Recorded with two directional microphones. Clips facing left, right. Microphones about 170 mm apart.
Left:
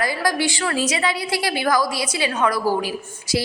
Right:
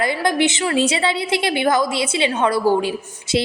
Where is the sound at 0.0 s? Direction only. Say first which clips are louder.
Right 3 dB; 25° right (ahead or behind).